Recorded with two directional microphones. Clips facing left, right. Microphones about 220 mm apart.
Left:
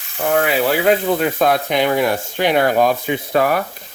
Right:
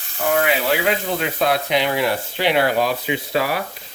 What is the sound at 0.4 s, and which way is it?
Speech, 45° left (ahead or behind).